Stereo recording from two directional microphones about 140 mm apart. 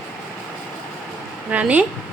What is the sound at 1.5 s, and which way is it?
Speech, 10° right (ahead or behind).